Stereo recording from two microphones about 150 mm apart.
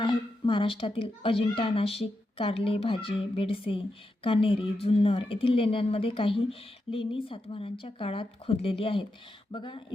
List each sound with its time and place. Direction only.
0.4 s speech: 35° left (ahead or behind)